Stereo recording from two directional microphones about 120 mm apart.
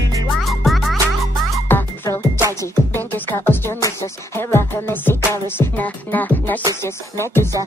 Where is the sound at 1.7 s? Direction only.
20° left (ahead or behind).